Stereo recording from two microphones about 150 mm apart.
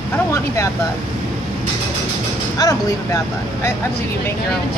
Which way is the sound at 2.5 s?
25° left (ahead or behind).